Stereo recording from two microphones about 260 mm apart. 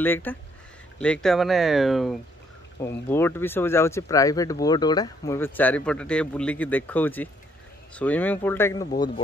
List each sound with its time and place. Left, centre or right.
0.0 s speech: centre